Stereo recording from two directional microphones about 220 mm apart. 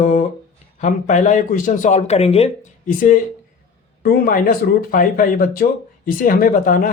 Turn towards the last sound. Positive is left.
turn(degrees=35)  # may be behind; listen again after turning